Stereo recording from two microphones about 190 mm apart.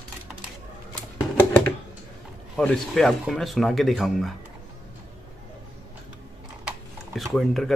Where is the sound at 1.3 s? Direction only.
10° left (ahead or behind).